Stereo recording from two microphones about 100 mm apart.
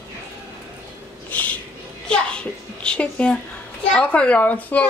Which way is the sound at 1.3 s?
15° left (ahead or behind).